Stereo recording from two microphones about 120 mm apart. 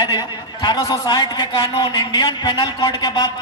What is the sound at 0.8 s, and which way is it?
A woman's voice, 30° left (ahead or behind).